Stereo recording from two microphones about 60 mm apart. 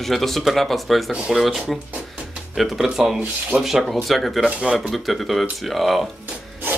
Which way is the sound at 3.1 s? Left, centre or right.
Right.